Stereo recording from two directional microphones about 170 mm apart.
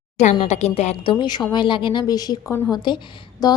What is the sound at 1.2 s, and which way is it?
Speech, 25° left (ahead or behind).